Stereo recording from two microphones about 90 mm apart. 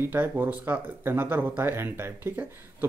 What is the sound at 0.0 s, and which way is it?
Speech, 25° right (ahead or behind).